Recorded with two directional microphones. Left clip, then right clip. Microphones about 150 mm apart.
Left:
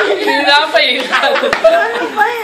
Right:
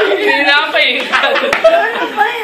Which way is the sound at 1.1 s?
10° left (ahead or behind).